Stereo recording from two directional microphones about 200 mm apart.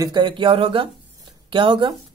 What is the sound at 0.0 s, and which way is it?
Speech, 20° right (ahead or behind).